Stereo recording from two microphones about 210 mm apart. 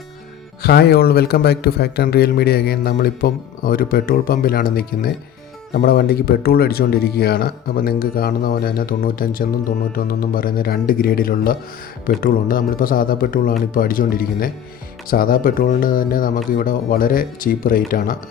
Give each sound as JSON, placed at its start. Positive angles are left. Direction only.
{"t": 0.6, "sound": "speech", "side_deg": 50}